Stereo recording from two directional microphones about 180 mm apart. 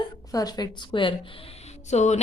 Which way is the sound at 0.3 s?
20° left (ahead or behind).